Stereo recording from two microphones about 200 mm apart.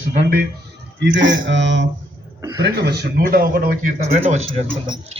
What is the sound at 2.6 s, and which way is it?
Speech, 55° right (ahead or behind).